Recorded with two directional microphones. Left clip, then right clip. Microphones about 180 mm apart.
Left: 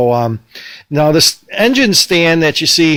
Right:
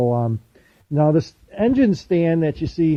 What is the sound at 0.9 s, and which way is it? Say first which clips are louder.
Speech: left 9 dB; 10° left (ahead or behind).